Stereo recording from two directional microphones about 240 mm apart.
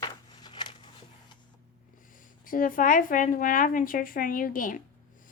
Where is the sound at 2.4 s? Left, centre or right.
Left.